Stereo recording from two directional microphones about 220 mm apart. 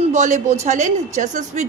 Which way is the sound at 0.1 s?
35° right (ahead or behind).